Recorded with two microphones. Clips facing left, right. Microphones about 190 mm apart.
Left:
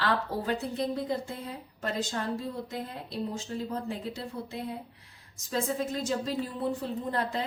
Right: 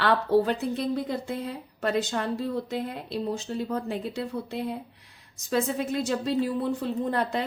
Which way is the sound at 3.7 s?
65° right (ahead or behind).